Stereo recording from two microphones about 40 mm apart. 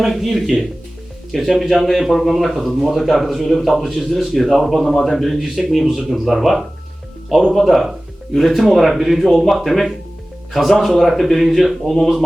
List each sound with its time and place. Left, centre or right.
0.0 s a man's voice: centre
5.4 s a man's voice: centre